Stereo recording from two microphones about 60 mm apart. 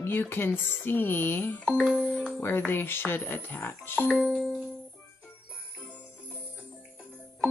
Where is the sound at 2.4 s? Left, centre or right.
Left.